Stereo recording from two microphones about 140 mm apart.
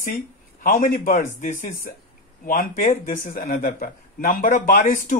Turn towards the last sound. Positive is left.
turn(degrees=85)